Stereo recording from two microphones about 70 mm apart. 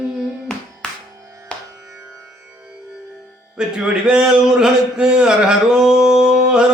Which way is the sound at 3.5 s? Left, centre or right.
Centre.